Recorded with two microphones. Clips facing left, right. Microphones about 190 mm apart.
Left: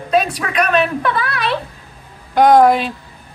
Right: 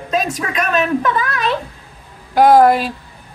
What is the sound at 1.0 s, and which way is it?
Speech, 35° left (ahead or behind).